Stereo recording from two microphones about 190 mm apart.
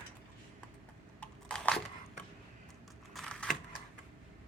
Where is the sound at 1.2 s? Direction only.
5° left (ahead or behind).